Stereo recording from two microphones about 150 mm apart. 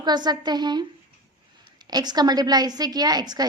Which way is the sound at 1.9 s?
25° right (ahead or behind).